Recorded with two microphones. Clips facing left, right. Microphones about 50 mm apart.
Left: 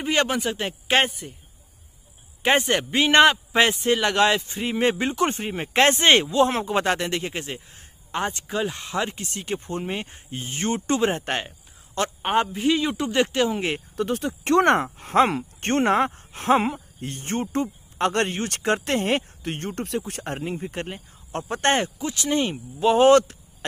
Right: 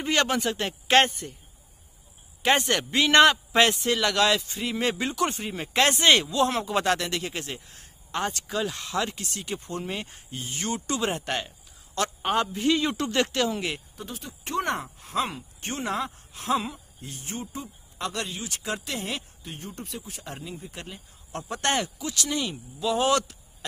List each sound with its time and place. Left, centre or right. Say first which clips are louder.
0.1 s speech: left 2 dB; centre
2.4 s speech: left 3 dB; left
12.5 s speech: left 2 dB; centre
13.9 s speech: left 14 dB; left
19.4 s speech: left 9 dB; left
20.3 s speech: left 9 dB; left